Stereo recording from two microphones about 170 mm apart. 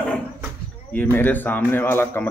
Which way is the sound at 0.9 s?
10° left (ahead or behind).